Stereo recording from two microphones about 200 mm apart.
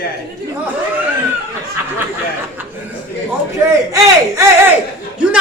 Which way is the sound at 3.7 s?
15° right (ahead or behind).